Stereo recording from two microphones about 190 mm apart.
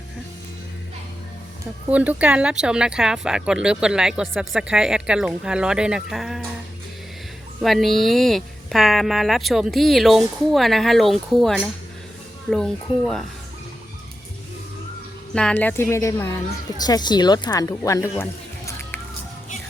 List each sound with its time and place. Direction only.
1.9 s speech: 10° right (ahead or behind)
7.6 s speech: centre (ahead or behind)
15.4 s a woman's voice: 5° left (ahead or behind)
18.2 s music: 10° left (ahead or behind)